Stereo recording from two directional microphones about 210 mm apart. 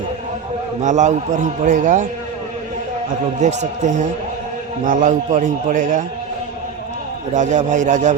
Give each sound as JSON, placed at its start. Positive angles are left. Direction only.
{"t": 0.8, "sound": "a man's voice", "side_deg": -35}
{"t": 3.4, "sound": "a man's voice", "side_deg": -35}
{"t": 7.3, "sound": "a man's voice", "side_deg": -35}